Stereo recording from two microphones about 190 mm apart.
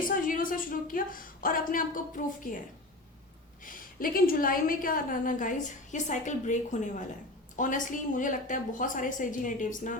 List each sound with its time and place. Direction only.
0.1 s a woman's voice: 45° left (ahead or behind)
3.6 s a woman's voice: 45° left (ahead or behind)